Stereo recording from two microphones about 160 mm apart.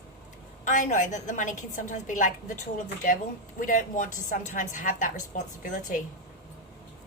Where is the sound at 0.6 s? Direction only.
50° left (ahead or behind).